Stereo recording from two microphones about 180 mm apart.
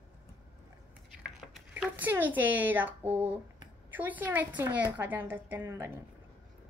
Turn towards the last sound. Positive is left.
turn(degrees=-15)  # may be behind; listen again after turning